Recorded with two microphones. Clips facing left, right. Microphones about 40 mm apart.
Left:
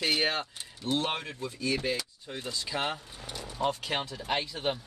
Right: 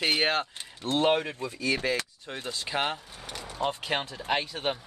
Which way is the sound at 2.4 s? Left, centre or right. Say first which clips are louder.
Right 3 dB; right.